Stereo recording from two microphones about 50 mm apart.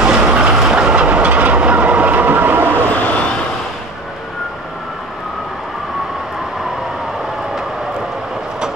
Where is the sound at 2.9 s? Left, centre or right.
Left.